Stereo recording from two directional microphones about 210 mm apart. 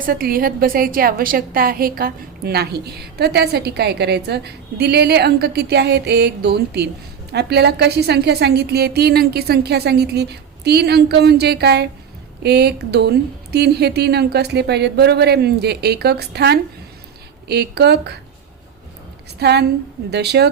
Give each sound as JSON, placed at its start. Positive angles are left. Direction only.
{"t": 0.0, "sound": "a woman's voice", "side_deg": -45}
{"t": 19.4, "sound": "a woman's voice", "side_deg": -50}